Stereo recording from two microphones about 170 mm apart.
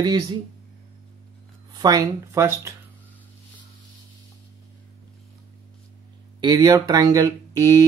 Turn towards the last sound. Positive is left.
turn(degrees=-20)  # may be behind; listen again after turning